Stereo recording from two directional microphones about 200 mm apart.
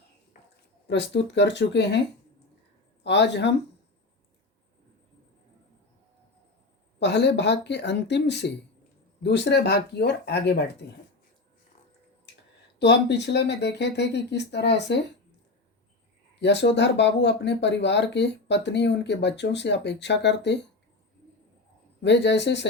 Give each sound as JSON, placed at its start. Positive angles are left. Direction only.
{"t": 0.9, "sound": "speech", "side_deg": 60}
{"t": 3.0, "sound": "speech", "side_deg": 60}
{"t": 7.0, "sound": "speech", "side_deg": 60}
{"t": 12.8, "sound": "speech", "side_deg": 55}
{"t": 16.3, "sound": "speech", "side_deg": 60}
{"t": 22.0, "sound": "speech", "side_deg": 60}